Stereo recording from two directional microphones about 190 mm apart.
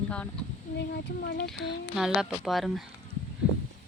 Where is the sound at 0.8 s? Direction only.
60° left (ahead or behind).